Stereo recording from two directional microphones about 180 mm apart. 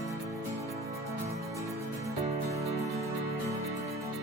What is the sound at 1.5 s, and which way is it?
Music, 15° right (ahead or behind).